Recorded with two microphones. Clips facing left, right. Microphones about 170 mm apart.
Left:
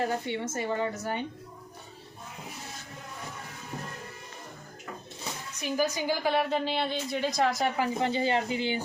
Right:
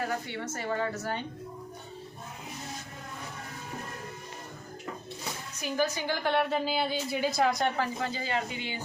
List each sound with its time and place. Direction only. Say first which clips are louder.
0.0 s a woman's voice: left 3 dB; 25° left (ahead or behind)
5.6 s a woman's voice: left 2 dB; 10° left (ahead or behind)
7.8 s a woman's voice: left 4 dB; 20° left (ahead or behind)